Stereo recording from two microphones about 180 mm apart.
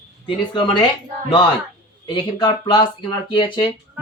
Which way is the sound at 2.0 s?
25° left (ahead or behind).